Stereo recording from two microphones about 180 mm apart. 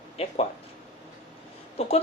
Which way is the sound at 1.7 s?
35° left (ahead or behind).